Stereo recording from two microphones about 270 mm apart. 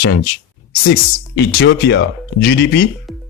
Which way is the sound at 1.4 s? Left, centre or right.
Left.